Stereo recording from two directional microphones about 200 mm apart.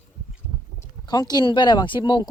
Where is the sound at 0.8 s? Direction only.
20° left (ahead or behind).